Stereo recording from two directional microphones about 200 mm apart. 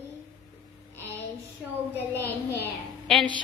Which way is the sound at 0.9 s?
10° left (ahead or behind).